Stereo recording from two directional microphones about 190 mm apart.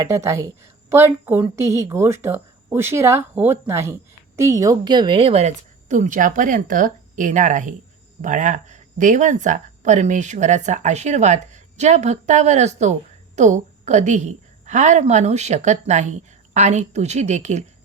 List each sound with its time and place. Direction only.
0.0 s a woman's voice: 15° right (ahead or behind); by 17.7 s 35° right (ahead or behind)